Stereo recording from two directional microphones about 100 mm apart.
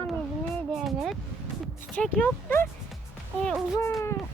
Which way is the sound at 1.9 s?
10° left (ahead or behind).